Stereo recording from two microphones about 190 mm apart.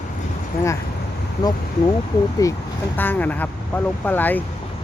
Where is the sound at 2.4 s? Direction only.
15° left (ahead or behind).